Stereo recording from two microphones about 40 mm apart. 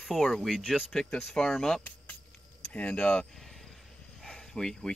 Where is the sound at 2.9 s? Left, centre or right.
Left.